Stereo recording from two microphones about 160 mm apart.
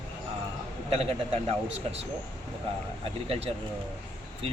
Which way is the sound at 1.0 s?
40° right (ahead or behind).